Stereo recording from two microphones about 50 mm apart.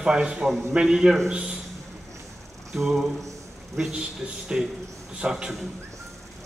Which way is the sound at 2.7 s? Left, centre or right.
Centre.